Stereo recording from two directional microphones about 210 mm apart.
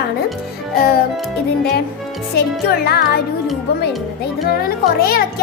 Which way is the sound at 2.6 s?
50° left (ahead or behind).